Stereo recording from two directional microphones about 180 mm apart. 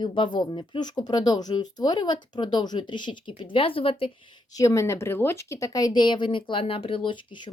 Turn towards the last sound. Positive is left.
turn(degrees=30)  # may be behind; listen again after turning